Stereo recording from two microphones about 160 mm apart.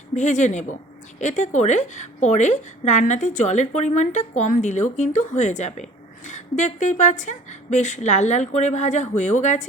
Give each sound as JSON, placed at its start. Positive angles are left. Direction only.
{"t": 0.1, "sound": "a woman's voice", "side_deg": 50}